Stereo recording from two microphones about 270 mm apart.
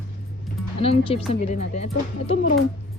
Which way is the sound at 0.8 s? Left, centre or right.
Left.